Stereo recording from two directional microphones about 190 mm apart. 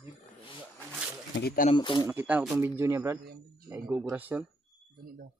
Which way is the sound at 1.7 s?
25° left (ahead or behind).